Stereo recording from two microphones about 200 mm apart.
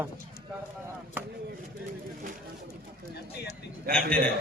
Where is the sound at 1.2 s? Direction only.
10° right (ahead or behind).